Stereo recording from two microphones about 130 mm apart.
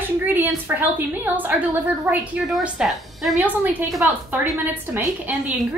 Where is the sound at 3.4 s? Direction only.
15° right (ahead or behind).